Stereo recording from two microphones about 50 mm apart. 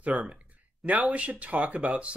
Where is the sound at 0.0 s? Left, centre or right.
Right.